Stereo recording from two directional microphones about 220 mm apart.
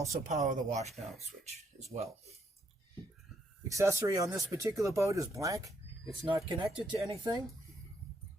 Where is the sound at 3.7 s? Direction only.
15° right (ahead or behind).